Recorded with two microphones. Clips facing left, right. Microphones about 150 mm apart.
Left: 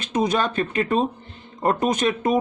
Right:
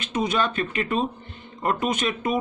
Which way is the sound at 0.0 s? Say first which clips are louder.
Left 3 dB; 40° left (ahead or behind).